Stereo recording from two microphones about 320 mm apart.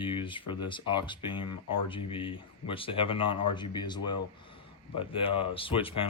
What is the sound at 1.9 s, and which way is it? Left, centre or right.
Speech, centre.